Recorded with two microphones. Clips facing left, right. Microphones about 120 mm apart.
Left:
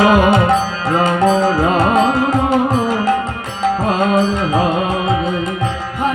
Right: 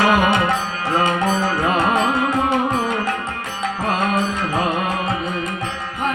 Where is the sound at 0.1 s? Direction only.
35° left (ahead or behind).